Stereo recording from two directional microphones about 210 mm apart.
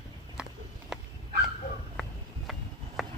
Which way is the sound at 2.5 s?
Centre (ahead or behind).